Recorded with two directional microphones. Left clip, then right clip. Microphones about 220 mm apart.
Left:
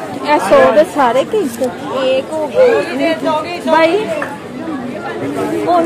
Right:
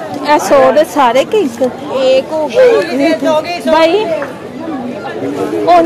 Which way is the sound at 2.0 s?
45° right (ahead or behind).